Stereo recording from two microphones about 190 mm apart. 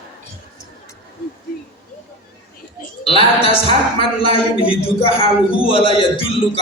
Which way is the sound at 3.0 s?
30° left (ahead or behind).